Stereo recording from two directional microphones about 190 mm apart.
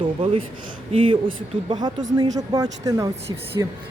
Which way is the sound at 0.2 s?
30° right (ahead or behind).